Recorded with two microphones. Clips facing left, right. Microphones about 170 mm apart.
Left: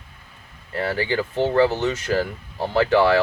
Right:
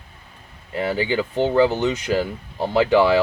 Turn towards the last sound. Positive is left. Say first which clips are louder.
# right 1 dB
turn(degrees=-15)  # may be behind; listen again after turning